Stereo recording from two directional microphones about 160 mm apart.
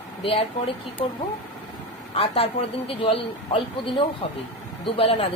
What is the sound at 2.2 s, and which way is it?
A man's voice, 35° left (ahead or behind).